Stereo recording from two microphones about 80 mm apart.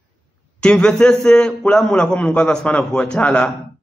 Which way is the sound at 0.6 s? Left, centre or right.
Centre.